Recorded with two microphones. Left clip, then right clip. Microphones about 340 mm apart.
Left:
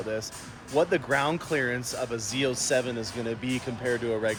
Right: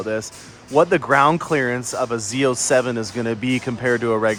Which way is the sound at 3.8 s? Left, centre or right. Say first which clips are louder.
Right 9 dB; right.